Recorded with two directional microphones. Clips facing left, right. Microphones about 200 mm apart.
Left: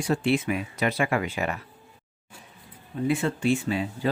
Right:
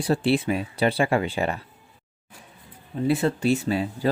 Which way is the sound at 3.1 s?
40° right (ahead or behind).